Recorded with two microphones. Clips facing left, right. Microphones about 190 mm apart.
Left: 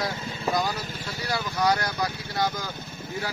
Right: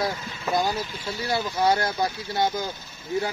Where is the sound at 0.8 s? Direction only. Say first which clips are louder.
Right 3 dB; 45° left (ahead or behind).